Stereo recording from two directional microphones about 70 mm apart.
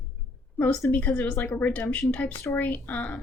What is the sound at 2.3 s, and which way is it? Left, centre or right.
Speech, left.